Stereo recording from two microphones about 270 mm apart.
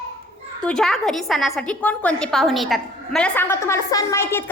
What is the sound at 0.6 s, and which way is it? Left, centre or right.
A woman's voice, centre.